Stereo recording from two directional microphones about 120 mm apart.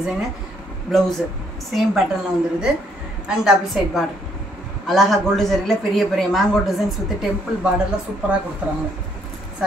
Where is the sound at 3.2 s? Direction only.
5° right (ahead or behind).